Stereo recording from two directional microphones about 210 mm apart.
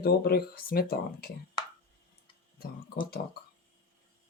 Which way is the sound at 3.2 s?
45° left (ahead or behind).